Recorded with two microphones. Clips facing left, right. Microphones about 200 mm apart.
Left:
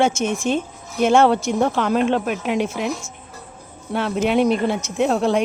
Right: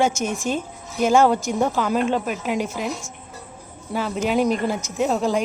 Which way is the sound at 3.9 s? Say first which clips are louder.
Left 3 dB; centre (ahead or behind).